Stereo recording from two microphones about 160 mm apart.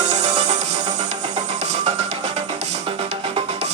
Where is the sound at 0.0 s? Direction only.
40° right (ahead or behind).